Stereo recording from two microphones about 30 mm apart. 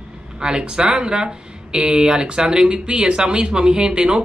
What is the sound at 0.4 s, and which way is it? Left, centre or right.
Speech, right.